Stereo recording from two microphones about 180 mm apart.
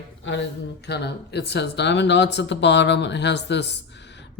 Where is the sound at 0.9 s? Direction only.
70° left (ahead or behind).